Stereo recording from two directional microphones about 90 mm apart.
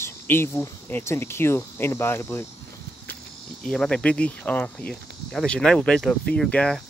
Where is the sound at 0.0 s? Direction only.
25° left (ahead or behind).